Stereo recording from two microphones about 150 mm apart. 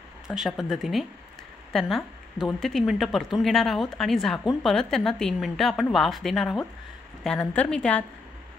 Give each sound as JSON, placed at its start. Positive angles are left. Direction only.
{"t": 0.3, "sound": "a woman's voice", "side_deg": 0}